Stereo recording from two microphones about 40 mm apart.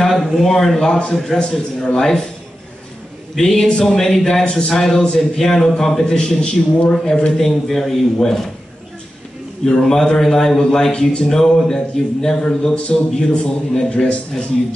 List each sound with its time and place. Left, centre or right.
0.0 s a sound: centre
0.4 s speech: centre
3.3 s speech: centre
7.3 s speech: centre
9.7 s speech: centre
11.2 s speech: centre